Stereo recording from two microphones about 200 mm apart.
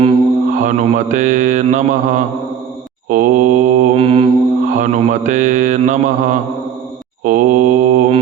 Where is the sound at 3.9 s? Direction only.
30° right (ahead or behind).